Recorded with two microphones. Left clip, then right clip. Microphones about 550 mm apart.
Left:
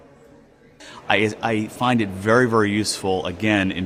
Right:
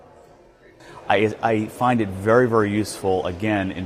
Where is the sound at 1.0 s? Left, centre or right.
Right.